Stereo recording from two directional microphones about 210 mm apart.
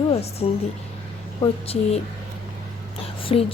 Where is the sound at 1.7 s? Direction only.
30° left (ahead or behind).